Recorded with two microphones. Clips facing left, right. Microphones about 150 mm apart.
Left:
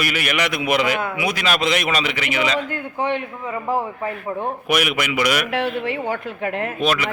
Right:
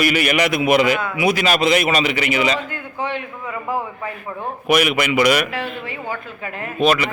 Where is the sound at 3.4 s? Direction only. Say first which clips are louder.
Left 1 dB; 30° left (ahead or behind).